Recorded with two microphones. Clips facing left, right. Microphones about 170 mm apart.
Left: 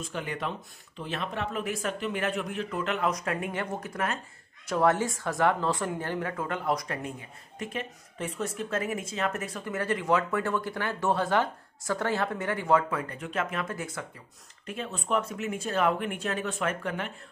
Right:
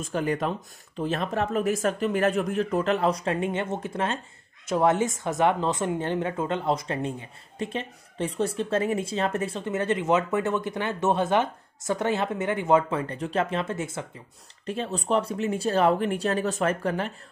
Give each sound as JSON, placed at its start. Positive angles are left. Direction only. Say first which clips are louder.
{"t": 0.0, "sound": "speech", "louder": "right 7 dB", "side_deg": -40}